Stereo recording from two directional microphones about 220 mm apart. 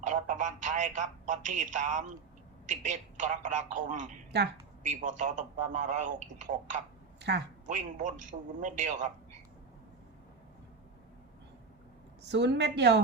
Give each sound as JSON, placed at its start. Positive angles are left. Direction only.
{"t": 0.0, "sound": "speech", "side_deg": -35}
{"t": 7.2, "sound": "a woman's voice", "side_deg": -50}
{"t": 7.7, "sound": "speech", "side_deg": -35}
{"t": 12.2, "sound": "a woman's voice", "side_deg": -50}